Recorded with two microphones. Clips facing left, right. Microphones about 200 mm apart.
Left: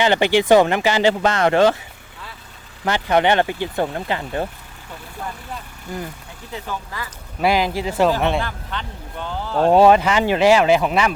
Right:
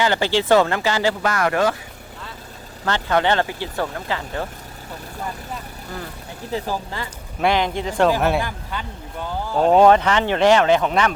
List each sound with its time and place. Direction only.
0.0 s speech: 20° left (ahead or behind)
2.8 s speech: 15° left (ahead or behind)
5.9 s speech: 15° left (ahead or behind)
6.5 s speech: 35° right (ahead or behind)
7.3 s speech: 5° left (ahead or behind)
8.2 s speech: 10° right (ahead or behind)
9.7 s speech: 10° left (ahead or behind)